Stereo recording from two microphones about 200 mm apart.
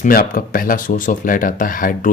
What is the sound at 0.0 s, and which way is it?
Speech, 45° left (ahead or behind).